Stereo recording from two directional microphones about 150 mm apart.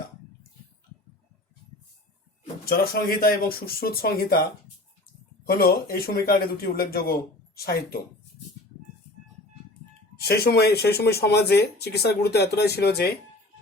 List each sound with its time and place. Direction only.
2.6 s speech: 85° left
5.5 s speech: 90° left
10.2 s speech: 90° left